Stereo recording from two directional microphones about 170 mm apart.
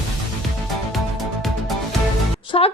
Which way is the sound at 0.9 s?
Centre (ahead or behind).